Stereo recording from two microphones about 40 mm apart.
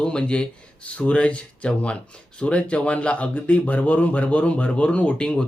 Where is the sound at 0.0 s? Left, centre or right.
Left.